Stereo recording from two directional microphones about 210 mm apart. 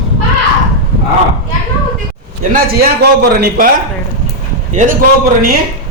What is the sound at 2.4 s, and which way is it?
A man's voice, 40° right (ahead or behind).